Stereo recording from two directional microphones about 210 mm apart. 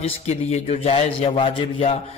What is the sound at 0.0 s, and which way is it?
A man's voice, 30° left (ahead or behind).